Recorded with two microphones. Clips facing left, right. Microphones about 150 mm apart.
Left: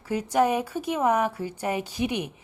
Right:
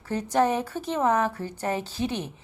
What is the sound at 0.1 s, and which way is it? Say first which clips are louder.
A woman's voice: left 1 dB; 10° left (ahead or behind).